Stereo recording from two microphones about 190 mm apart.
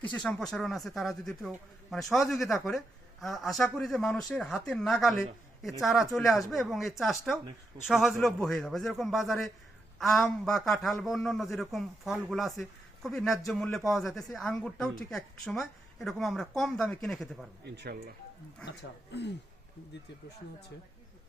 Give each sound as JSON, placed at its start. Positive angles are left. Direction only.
{"t": 0.1, "sound": "speech", "side_deg": 5}
{"t": 17.7, "sound": "speech", "side_deg": -55}
{"t": 18.6, "sound": "speech", "side_deg": 65}